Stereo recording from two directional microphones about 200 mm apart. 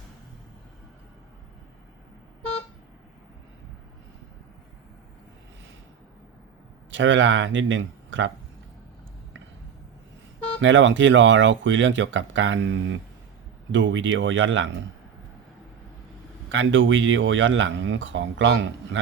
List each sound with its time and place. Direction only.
6.9 s speech: 70° right (ahead or behind)
10.6 s speech: 70° right (ahead or behind)
16.5 s speech: 70° right (ahead or behind)